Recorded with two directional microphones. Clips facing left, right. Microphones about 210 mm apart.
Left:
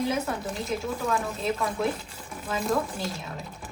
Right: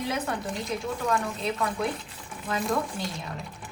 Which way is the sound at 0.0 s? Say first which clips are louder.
Left 2 dB; centre (ahead or behind).